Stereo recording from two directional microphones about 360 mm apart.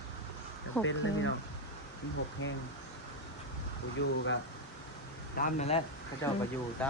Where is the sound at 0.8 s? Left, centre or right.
Left.